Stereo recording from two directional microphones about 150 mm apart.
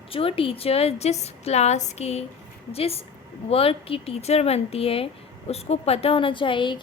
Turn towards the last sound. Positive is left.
turn(degrees=35)  # may be behind; listen again after turning